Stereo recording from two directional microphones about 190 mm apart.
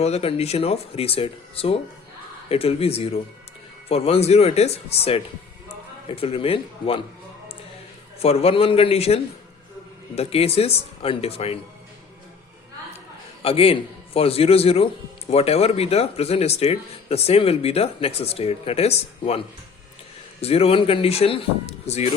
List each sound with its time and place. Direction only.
0.0 s speech: 35° left (ahead or behind)
8.2 s speech: 30° left (ahead or behind)
13.4 s speech: 30° left (ahead or behind)
20.4 s speech: 30° left (ahead or behind)